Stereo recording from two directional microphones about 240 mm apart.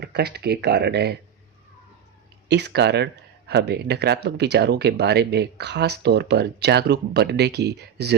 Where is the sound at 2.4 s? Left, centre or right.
Right.